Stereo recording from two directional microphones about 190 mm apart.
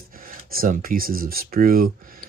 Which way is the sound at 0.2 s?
50° right (ahead or behind).